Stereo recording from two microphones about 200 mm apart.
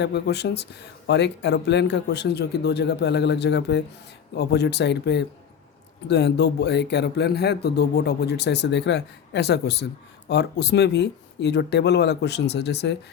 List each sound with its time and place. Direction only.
0.0 s speech: 55° left (ahead or behind)